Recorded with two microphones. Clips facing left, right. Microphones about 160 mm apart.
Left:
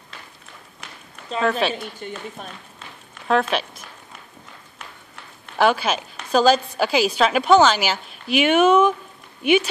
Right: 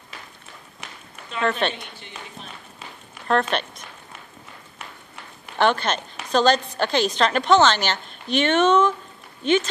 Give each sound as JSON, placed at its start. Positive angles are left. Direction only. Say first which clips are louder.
{"t": 1.4, "sound": "a woman's voice", "louder": "left 2 dB", "side_deg": 5}
{"t": 3.3, "sound": "speech", "louder": "left 1 dB", "side_deg": 5}
{"t": 5.6, "sound": "a woman's voice", "louder": "left 2 dB", "side_deg": 5}